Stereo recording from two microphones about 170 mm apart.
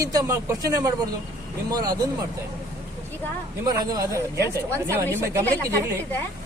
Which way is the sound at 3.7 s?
20° right (ahead or behind).